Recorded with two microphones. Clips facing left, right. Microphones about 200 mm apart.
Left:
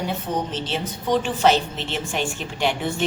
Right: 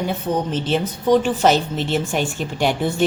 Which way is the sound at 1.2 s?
40° right (ahead or behind).